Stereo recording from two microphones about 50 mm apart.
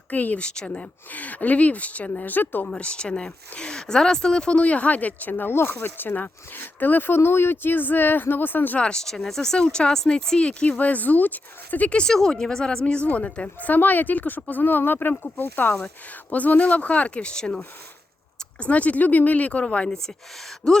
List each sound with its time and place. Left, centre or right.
0.1 s speech: left
0.4 s speech: centre
1.1 s speech: left
2.3 s speech: left
2.6 s speech: centre; by 8.8 s left
8.8 s speech: centre
10.6 s speech: left
11.9 s speech: left
12.1 s speech: centre
18.6 s speech: left